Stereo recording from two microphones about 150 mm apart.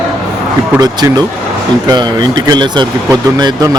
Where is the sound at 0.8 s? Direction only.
25° right (ahead or behind).